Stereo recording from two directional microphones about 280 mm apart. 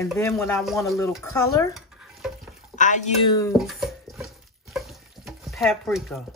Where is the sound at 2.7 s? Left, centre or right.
Left.